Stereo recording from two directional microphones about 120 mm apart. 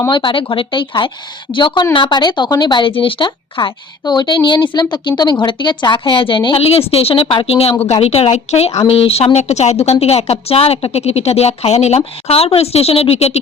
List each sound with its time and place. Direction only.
0.1 s a woman's voice: 45° left (ahead or behind); by 13.4 s 60° left (ahead or behind)